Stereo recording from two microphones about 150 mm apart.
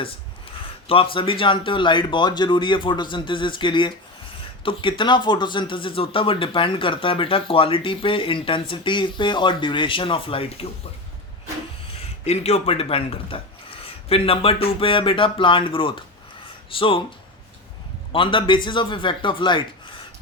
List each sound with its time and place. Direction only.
0.9 s speech: 40° left (ahead or behind)
12.2 s speech: 45° left (ahead or behind)
18.1 s speech: 35° left (ahead or behind)